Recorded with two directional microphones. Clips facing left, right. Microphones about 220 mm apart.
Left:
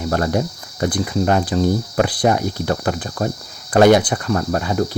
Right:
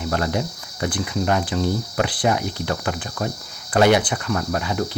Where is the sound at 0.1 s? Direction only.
40° left (ahead or behind).